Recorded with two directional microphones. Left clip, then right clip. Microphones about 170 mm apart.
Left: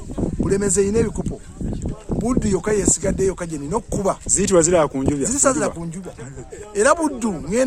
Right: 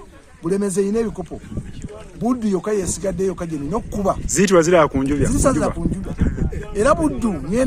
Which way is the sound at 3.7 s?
10° left (ahead or behind).